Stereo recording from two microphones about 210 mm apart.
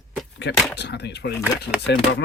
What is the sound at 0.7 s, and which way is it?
Speech, 55° left (ahead or behind).